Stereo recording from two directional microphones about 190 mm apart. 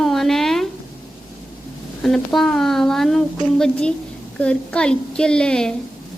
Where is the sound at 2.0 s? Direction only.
Centre (ahead or behind).